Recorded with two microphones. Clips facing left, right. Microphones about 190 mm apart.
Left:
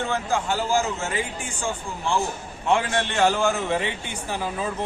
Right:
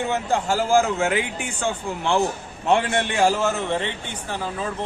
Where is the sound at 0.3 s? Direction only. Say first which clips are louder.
Right 5 dB; 45° right (ahead or behind); by 2.2 s 65° right (ahead or behind).